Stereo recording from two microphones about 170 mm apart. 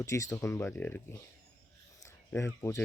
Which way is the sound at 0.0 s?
20° left (ahead or behind).